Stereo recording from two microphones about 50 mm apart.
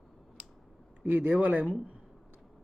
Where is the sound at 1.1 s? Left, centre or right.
Right.